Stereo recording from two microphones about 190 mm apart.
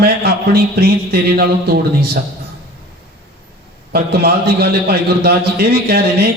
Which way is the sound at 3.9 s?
55° right (ahead or behind).